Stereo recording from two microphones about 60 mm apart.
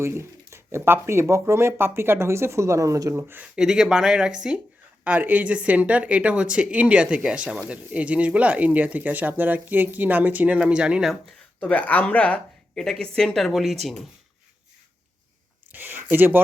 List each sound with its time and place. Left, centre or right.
0.0 s speech: right
3.2 s speech: right
3.4 s speech: centre
5.0 s speech: right
11.6 s speech: left
12.7 s speech: centre
15.7 s a sound: right